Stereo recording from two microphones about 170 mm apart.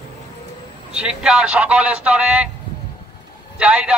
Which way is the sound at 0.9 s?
5° right (ahead or behind).